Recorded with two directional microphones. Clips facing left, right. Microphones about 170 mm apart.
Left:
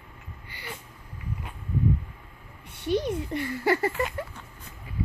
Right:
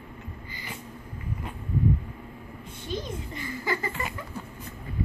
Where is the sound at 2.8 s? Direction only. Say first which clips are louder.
Left 8 dB; 65° left (ahead or behind).